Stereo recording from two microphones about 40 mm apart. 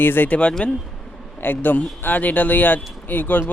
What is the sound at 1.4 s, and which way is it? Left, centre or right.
Speech, left.